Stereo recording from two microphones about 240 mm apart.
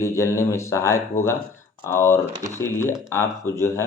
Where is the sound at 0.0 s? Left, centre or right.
Centre.